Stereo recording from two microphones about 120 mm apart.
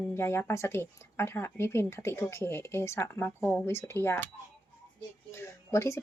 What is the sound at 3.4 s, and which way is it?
Speech, 5° left (ahead or behind).